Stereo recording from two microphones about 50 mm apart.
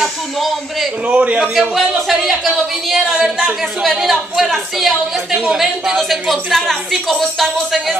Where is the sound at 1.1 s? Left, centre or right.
Centre.